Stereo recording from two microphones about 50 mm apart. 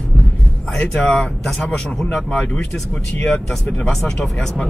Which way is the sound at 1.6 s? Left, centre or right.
Centre.